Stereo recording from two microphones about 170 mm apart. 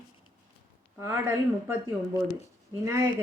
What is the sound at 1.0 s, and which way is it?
Speech, 15° right (ahead or behind).